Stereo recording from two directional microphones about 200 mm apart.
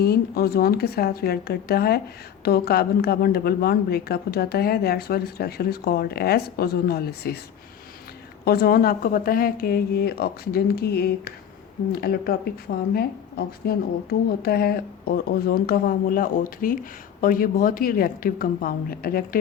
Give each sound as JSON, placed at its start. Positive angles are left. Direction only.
{"t": 0.0, "sound": "a woman's voice", "side_deg": 50}
{"t": 8.4, "sound": "a woman's voice", "side_deg": 50}